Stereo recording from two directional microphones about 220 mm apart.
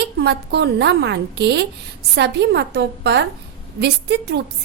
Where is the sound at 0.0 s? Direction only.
50° right (ahead or behind).